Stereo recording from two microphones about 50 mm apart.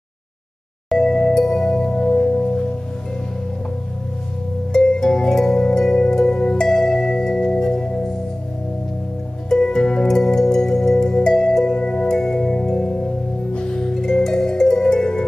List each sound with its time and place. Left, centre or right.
0.9 s music: centre
4.7 s music: centre
9.5 s music: centre